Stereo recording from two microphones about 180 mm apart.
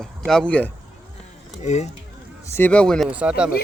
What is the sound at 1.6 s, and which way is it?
Speech, 40° left (ahead or behind).